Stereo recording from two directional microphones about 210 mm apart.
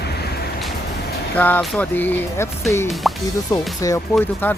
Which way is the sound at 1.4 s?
10° left (ahead or behind).